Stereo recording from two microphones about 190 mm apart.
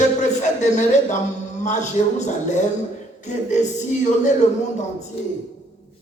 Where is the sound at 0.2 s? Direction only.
40° left (ahead or behind).